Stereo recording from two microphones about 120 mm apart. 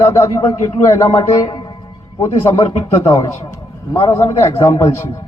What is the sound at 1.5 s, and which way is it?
Music, 40° left (ahead or behind).